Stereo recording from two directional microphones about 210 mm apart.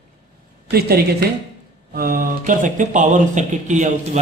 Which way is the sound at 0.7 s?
50° right (ahead or behind).